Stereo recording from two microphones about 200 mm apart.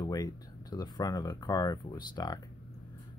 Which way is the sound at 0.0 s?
20° left (ahead or behind).